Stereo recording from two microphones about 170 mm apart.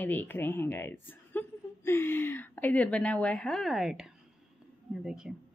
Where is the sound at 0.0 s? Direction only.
10° left (ahead or behind).